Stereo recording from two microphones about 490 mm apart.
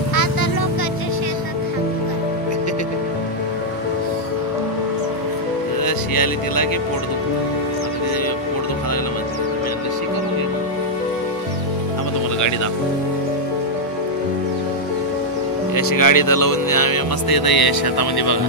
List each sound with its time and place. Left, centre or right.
0.1 s music: left
5.9 s music: left
15.7 s speech: left